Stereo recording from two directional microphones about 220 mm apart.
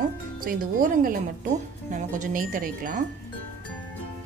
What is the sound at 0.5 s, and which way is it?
Speech, 40° right (ahead or behind).